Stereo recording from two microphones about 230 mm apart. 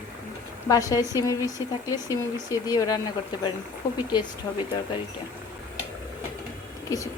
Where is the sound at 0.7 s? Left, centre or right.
Centre.